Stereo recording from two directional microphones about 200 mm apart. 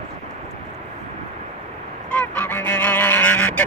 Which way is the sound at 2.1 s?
10° left (ahead or behind).